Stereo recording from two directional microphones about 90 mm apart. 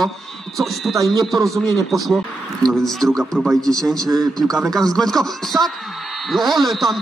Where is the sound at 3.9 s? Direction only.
45° right (ahead or behind).